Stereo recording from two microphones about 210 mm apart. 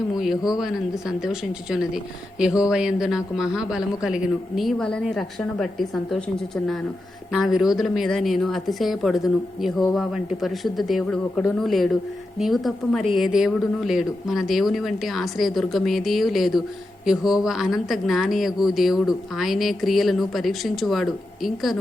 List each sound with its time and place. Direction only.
0.1 s speech: centre (ahead or behind)